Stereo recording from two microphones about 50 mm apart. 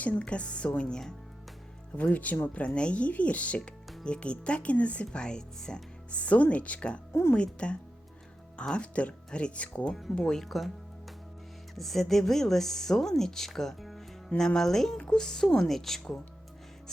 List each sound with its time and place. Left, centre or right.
0.0 s speech: left
2.0 s speech: left
7.1 s a woman's voice: left
7.3 s speech: left
9.8 s speech: centre
11.7 s speech: centre
14.3 s speech: centre